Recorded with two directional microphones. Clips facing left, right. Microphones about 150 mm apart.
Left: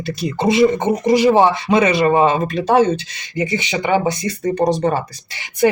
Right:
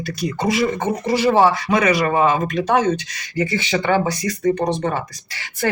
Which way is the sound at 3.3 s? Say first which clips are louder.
Even; 20° left (ahead or behind).